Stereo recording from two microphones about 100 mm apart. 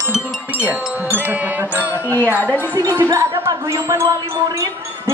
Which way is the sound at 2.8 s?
35° right (ahead or behind).